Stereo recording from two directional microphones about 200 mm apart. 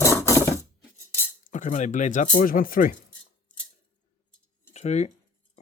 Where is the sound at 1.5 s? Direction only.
40° left (ahead or behind).